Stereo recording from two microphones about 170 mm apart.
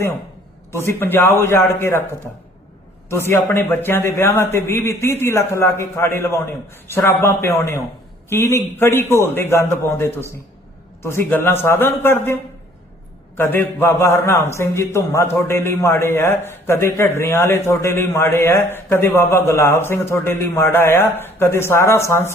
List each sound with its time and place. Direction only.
0.7 s a man's voice: 15° left (ahead or behind)
3.1 s a man's voice: 15° left (ahead or behind)